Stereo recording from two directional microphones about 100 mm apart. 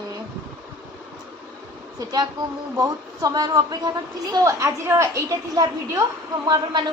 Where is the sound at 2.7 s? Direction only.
35° right (ahead or behind).